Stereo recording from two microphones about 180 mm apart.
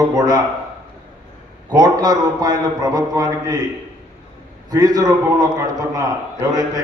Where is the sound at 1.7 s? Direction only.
20° right (ahead or behind).